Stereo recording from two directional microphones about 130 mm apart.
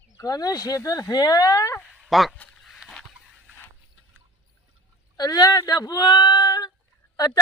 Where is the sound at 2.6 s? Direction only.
Centre (ahead or behind).